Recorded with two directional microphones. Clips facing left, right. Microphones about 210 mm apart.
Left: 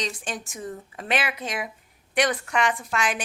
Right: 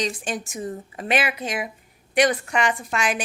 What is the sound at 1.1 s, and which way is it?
Speech, 5° right (ahead or behind).